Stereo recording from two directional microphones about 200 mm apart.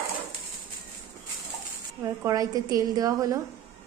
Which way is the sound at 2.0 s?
15° right (ahead or behind).